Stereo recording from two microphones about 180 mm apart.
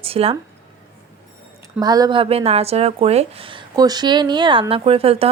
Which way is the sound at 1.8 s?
20° right (ahead or behind).